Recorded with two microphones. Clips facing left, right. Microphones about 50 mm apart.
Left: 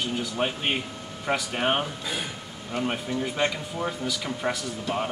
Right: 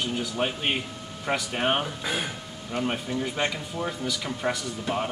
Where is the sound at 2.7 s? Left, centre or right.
Centre.